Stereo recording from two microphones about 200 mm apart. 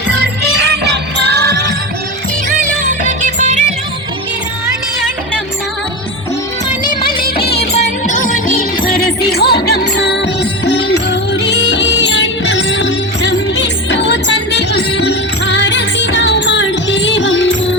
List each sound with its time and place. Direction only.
0.1 s music: 55° right (ahead or behind)
2.8 s music: 40° right (ahead or behind)
7.6 s music: 35° left (ahead or behind); by 17.7 s 65° left (ahead or behind)